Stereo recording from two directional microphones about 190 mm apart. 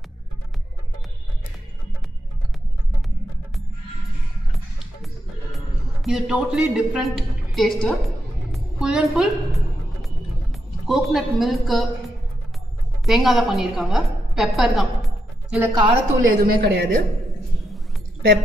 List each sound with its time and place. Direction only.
6.0 s a woman's voice: 5° right (ahead or behind)
10.9 s a woman's voice: centre (ahead or behind)
13.0 s a woman's voice: centre (ahead or behind)
15.7 s speech: 25° right (ahead or behind)
16.4 s a woman's voice: 55° right (ahead or behind)